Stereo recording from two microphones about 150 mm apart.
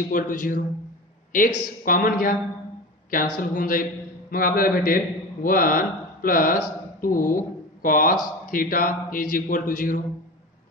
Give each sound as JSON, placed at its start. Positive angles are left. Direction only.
{"t": 0.1, "sound": "a man's voice", "side_deg": 65}